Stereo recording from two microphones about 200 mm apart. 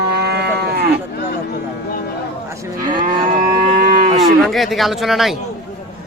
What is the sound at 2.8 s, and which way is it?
Moo, 40° right (ahead or behind).